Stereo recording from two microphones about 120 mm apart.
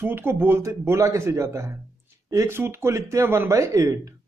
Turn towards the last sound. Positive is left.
turn(degrees=-25)  # may be behind; listen again after turning